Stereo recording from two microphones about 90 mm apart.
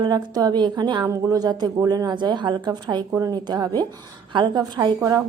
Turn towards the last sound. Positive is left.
turn(degrees=-40)  # may be behind; listen again after turning